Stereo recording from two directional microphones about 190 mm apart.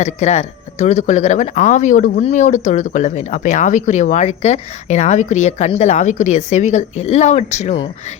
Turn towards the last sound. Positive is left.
turn(degrees=35)  # may be behind; listen again after turning